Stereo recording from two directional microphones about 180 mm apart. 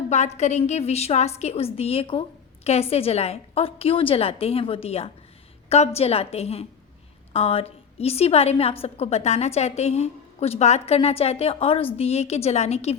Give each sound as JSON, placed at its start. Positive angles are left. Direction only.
{"t": 0.1, "sound": "a woman's voice", "side_deg": 40}